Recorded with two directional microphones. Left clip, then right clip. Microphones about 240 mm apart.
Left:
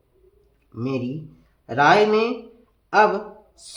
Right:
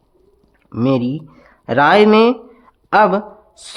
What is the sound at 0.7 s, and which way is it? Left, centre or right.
Speech, right.